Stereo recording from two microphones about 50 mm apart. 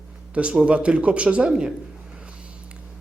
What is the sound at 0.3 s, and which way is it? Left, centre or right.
Speech, right.